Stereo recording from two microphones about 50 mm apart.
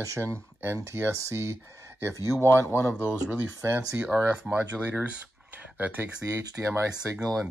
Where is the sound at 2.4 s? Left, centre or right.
Left.